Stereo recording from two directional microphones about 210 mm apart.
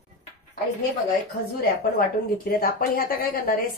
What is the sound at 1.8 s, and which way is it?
A woman's voice, 45° left (ahead or behind).